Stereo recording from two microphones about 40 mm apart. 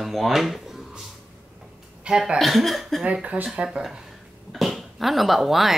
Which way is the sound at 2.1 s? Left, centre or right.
Right.